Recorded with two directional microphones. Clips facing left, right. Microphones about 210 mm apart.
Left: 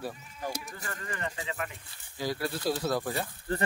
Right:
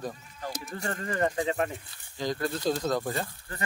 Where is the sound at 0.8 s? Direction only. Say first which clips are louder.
Right 11 dB; 35° right (ahead or behind).